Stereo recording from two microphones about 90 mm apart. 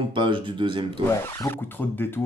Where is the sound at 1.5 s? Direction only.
25° left (ahead or behind).